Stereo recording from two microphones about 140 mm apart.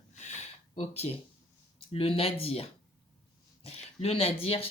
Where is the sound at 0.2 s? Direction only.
55° left (ahead or behind).